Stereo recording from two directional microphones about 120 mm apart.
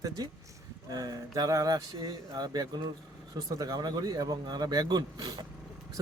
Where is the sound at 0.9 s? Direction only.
30° right (ahead or behind).